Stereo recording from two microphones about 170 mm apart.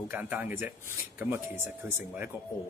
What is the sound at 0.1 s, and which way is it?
Speech, 10° right (ahead or behind).